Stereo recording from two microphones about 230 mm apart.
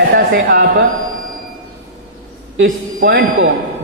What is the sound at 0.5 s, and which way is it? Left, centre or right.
Speech, right.